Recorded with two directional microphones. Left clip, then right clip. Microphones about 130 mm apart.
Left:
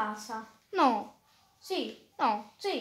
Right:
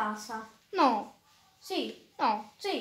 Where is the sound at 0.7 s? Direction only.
45° left (ahead or behind).